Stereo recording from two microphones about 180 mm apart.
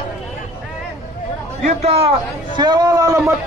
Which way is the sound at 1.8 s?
35° right (ahead or behind).